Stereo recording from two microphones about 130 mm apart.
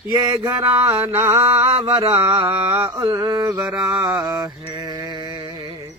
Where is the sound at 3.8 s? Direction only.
5° right (ahead or behind).